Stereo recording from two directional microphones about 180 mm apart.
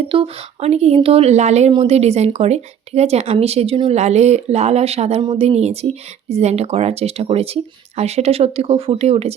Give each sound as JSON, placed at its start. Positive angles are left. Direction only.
{"t": 0.1, "sound": "speech", "side_deg": -35}